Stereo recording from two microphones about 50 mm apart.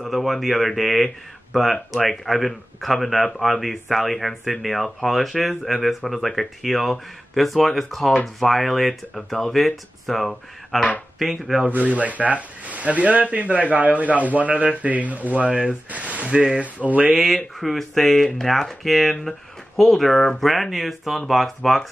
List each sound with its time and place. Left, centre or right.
0.0 s speech: centre
11.9 s speech: right
17.6 s speech: centre